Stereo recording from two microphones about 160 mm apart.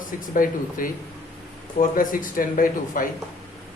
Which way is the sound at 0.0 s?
60° left (ahead or behind).